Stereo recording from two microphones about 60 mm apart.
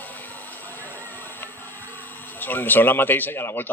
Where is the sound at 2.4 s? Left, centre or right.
Left.